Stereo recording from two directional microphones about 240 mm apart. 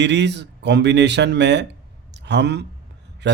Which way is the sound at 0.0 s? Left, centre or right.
Right.